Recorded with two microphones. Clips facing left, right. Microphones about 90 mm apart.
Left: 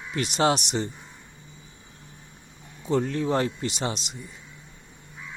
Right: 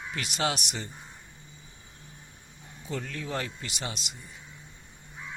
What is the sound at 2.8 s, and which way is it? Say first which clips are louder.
Speech: left 11 dB; 30° left (ahead or behind).